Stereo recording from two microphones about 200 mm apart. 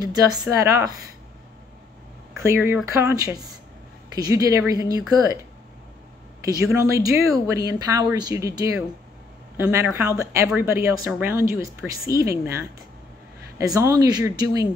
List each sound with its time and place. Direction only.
0.0 s speech: 20° right (ahead or behind)
2.4 s speech: 10° right (ahead or behind)
6.4 s speech: 15° right (ahead or behind)
13.7 s speech: 15° right (ahead or behind)